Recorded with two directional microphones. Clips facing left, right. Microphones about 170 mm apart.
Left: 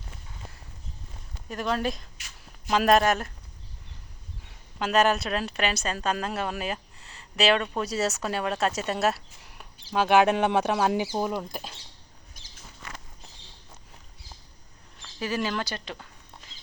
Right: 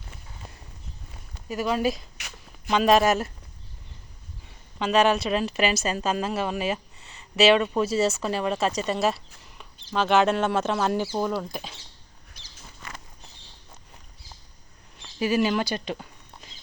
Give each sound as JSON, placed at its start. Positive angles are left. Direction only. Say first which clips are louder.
{"t": 1.5, "sound": "a woman's voice", "louder": "right 3 dB", "side_deg": -5}
{"t": 4.8, "sound": "a woman's voice", "louder": "right 2 dB", "side_deg": 0}
{"t": 12.4, "sound": "a sound", "louder": "right 3 dB", "side_deg": 45}
{"t": 15.2, "sound": "speech", "louder": "right 6 dB", "side_deg": -10}